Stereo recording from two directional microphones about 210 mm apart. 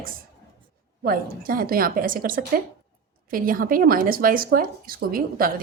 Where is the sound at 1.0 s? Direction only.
45° right (ahead or behind).